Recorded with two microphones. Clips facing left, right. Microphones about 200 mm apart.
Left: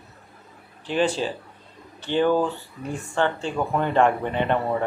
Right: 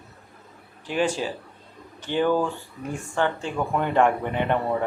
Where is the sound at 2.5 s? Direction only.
15° right (ahead or behind).